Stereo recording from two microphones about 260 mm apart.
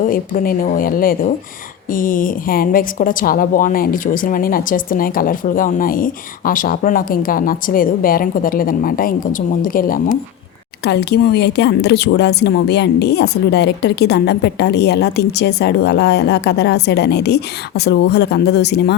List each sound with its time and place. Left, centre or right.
0.0 s a woman's voice: left